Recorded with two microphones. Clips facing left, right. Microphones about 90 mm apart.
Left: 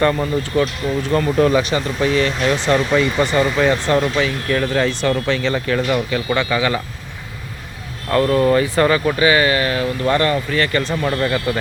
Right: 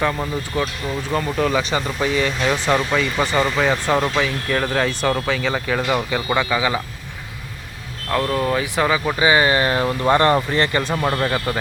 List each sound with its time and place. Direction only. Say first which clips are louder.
0.0 s speech: left 5 dB; centre (ahead or behind)
1.7 s speech: left 3 dB; 15° right (ahead or behind)
8.1 s speech: left 5 dB; centre (ahead or behind)
9.1 s speech: left 1 dB; 20° right (ahead or behind)